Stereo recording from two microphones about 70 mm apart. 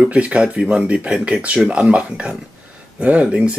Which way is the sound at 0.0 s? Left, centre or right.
Centre.